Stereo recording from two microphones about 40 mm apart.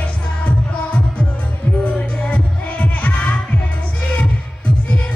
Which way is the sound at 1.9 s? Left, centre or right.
Left.